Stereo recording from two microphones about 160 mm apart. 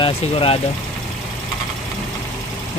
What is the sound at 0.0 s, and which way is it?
Speech, 35° left (ahead or behind).